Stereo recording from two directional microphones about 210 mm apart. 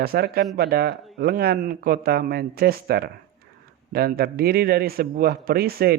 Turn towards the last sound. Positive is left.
turn(degrees=-45)  # may be behind; listen again after turning